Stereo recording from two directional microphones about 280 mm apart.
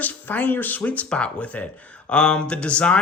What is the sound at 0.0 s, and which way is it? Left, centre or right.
Speech, centre.